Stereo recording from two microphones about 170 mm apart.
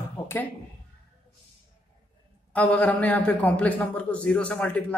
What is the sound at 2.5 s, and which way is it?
A man's voice, 10° left (ahead or behind).